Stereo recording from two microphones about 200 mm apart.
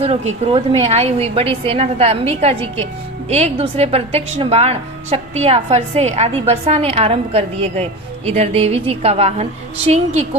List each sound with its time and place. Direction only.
0.0 s a woman's voice: 30° right (ahead or behind)